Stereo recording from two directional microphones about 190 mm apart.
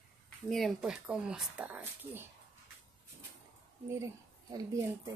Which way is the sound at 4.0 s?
20° right (ahead or behind).